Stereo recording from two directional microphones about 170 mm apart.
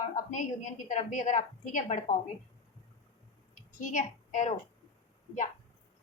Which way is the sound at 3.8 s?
50° left (ahead or behind).